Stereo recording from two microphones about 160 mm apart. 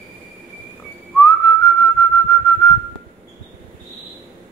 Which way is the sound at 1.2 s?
15° left (ahead or behind).